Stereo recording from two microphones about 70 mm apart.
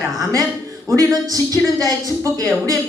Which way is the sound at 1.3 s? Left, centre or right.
Right.